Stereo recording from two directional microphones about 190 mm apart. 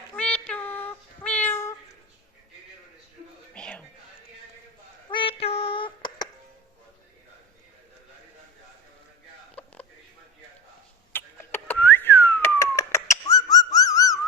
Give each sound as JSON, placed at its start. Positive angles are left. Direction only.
{"t": 0.2, "sound": "child singing", "side_deg": 5}
{"t": 3.5, "sound": "music", "side_deg": 5}
{"t": 5.1, "sound": "female singing", "side_deg": 30}
{"t": 9.6, "sound": "a sound", "side_deg": 10}
{"t": 11.1, "sound": "whistling", "side_deg": 10}